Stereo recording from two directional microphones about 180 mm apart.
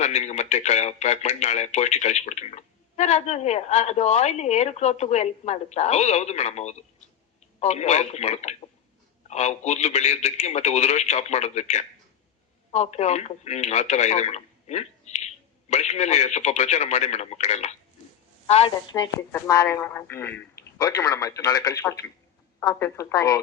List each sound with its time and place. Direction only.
0.0 s a woman's voice: 40° left (ahead or behind)
18.9 s speech: 20° left (ahead or behind)